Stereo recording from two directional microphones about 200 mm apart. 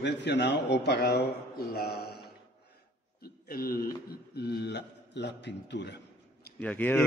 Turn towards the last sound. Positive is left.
turn(degrees=5)  # may be behind; listen again after turning